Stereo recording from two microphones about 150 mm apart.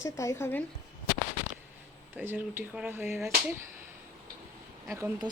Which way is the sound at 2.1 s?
15° right (ahead or behind).